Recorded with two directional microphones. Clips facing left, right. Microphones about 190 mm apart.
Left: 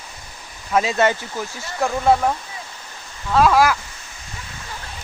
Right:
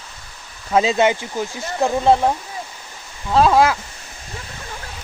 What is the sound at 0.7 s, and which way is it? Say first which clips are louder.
Speech: right 2 dB; 25° right (ahead or behind).